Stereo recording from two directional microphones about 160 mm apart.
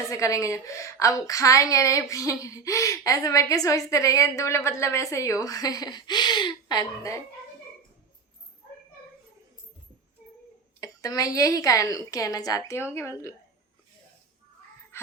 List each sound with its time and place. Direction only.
0.1 s a woman's voice: 20° left (ahead or behind)
10.8 s a woman's voice: 20° left (ahead or behind)
14.9 s a sound: 15° left (ahead or behind)